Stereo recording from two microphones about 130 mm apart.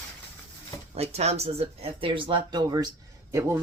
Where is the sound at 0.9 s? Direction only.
55° right (ahead or behind).